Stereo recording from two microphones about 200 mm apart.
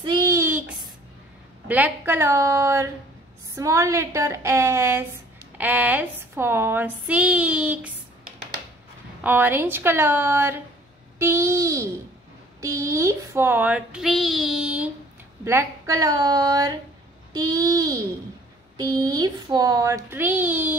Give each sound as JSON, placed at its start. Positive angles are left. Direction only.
{"t": 0.0, "sound": "a sound", "side_deg": -20}
{"t": 1.7, "sound": "speech", "side_deg": -10}
{"t": 9.2, "sound": "speech", "side_deg": -10}